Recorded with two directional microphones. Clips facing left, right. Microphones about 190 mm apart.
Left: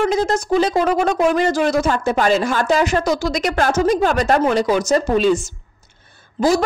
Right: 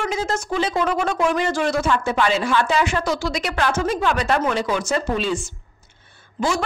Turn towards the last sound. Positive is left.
turn(degrees=40)  # may be behind; listen again after turning